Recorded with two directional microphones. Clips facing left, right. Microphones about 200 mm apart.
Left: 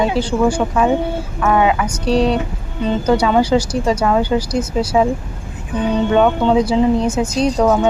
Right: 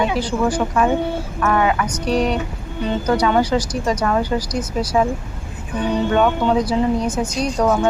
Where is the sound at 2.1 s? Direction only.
30° left (ahead or behind).